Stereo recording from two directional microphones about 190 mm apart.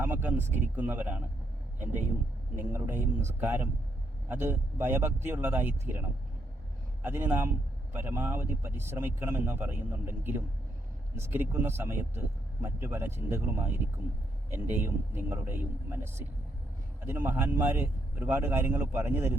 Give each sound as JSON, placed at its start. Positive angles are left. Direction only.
{"t": 0.0, "sound": "speech", "side_deg": -10}